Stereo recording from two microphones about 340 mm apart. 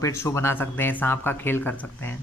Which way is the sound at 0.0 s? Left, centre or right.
Centre.